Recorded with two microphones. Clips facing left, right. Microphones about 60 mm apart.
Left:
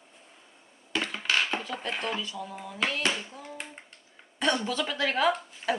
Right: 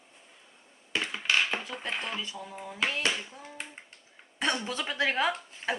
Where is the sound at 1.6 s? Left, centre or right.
Right.